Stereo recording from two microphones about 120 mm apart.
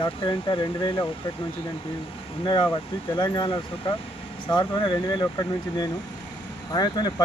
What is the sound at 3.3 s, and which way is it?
Speech, 40° left (ahead or behind).